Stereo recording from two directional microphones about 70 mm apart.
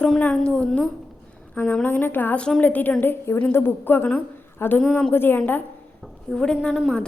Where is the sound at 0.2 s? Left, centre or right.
Centre.